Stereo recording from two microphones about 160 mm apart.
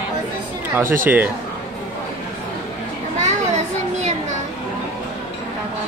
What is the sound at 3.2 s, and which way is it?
Children playing, 45° right (ahead or behind).